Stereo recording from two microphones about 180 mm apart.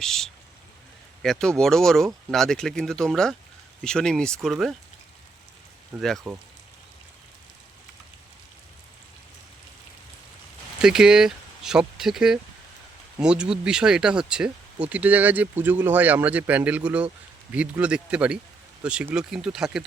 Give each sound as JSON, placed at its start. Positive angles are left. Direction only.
{"t": 0.0, "sound": "speech", "side_deg": 0}
{"t": 6.0, "sound": "speech", "side_deg": 0}
{"t": 10.8, "sound": "speech", "side_deg": -5}